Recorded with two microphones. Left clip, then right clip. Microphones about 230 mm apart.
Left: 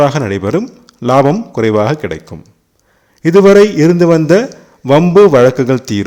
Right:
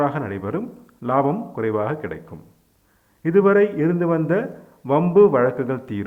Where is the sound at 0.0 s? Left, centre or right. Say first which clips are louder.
Left 11 dB; left.